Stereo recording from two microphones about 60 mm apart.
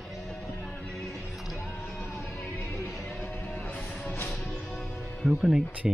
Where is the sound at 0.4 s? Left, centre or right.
Left.